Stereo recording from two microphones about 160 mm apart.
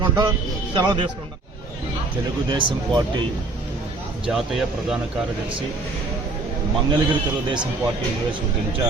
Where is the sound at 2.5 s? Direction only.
30° right (ahead or behind).